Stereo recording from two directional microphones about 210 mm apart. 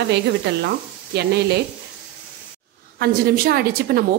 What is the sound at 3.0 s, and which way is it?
Speech, 50° right (ahead or behind).